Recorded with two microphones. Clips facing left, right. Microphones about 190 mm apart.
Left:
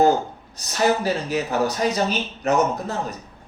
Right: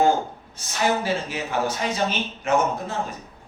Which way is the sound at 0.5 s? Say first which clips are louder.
Left 3 dB; 40° left (ahead or behind).